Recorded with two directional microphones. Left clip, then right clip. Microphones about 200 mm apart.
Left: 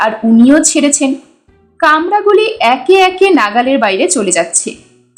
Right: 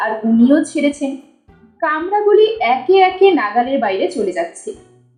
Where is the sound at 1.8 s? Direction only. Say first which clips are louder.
Left 7 dB; 30° left (ahead or behind).